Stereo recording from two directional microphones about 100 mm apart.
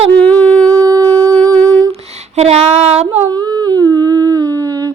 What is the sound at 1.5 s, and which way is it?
Humming, 15° left (ahead or behind).